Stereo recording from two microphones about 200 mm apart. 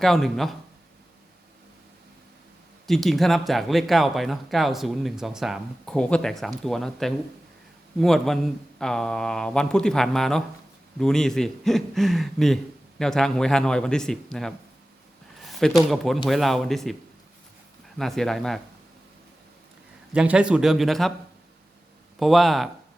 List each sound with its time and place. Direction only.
0.0 s speech: centre (ahead or behind)
2.8 s speech: centre (ahead or behind)
15.4 s a sound: centre (ahead or behind)
15.9 s speech: centre (ahead or behind)
20.1 s speech: 5° right (ahead or behind)
22.2 s speech: centre (ahead or behind)